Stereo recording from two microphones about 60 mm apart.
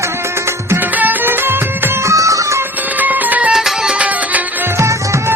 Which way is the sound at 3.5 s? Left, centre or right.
Centre.